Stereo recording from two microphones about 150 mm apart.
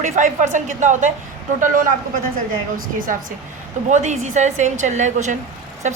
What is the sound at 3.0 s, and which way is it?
Speech, 65° right (ahead or behind).